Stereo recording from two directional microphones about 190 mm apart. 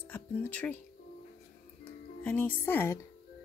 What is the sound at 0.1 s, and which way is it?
Speech, 10° left (ahead or behind).